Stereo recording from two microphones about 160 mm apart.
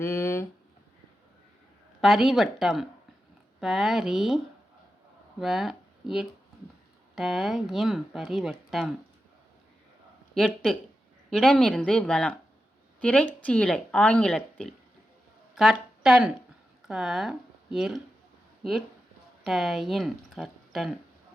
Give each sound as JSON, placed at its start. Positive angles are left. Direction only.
{"t": 0.0, "sound": "speech", "side_deg": 15}
{"t": 2.0, "sound": "speech", "side_deg": 0}
{"t": 5.4, "sound": "speech", "side_deg": 0}
{"t": 10.3, "sound": "speech", "side_deg": 5}
{"t": 19.5, "sound": "speech", "side_deg": 0}